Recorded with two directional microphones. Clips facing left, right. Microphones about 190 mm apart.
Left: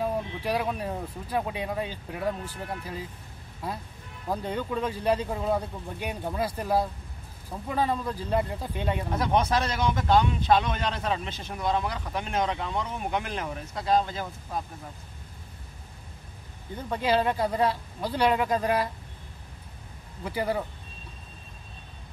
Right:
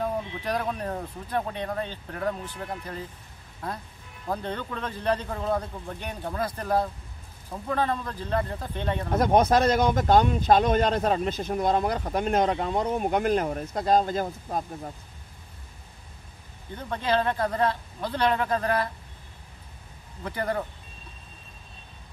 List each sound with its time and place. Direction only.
0.0 s speech: 10° left (ahead or behind)
9.1 s speech: 45° right (ahead or behind)
16.7 s speech: 10° left (ahead or behind)
20.2 s speech: 10° left (ahead or behind)